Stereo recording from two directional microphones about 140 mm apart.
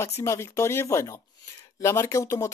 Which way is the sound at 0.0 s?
20° left (ahead or behind).